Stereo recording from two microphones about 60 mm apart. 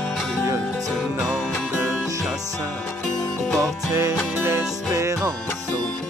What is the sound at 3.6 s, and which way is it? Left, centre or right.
Music, right.